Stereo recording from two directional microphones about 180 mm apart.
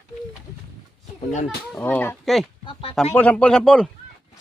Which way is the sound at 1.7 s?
10° left (ahead or behind).